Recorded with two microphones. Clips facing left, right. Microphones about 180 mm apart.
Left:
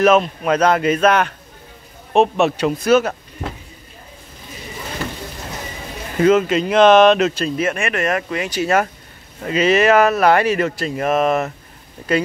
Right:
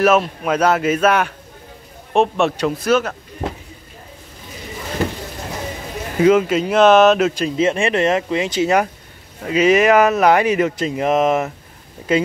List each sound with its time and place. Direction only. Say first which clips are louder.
0.0 s speech: left 1 dB; 5° right (ahead or behind)
6.2 s speech: right 1 dB; 10° right (ahead or behind)